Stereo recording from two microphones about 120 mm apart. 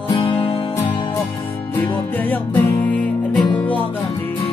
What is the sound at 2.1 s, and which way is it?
Music, 15° left (ahead or behind).